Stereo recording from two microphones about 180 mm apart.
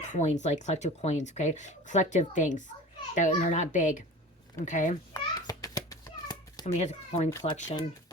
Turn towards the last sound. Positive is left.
turn(degrees=40)  # may be behind; listen again after turning